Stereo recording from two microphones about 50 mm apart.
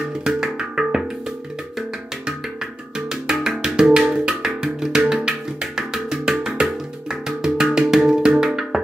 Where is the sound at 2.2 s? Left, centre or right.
Centre.